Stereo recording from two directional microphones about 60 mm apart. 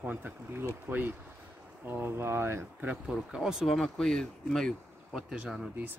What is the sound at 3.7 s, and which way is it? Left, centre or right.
Speech, centre.